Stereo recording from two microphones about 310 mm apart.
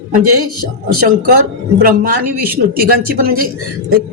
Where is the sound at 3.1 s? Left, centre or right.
Right.